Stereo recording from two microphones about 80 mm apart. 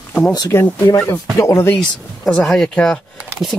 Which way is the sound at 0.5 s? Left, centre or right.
Left.